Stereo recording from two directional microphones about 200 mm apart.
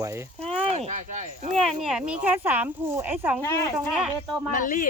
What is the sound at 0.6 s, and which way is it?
Speech, 30° right (ahead or behind).